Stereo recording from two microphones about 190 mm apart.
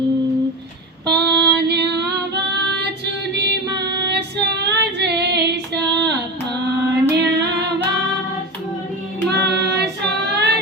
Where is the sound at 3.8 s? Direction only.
65° right (ahead or behind).